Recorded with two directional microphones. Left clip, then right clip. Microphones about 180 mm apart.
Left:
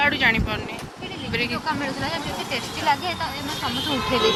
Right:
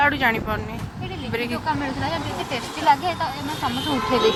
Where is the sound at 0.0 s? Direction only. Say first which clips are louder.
Even; 30° right (ahead or behind).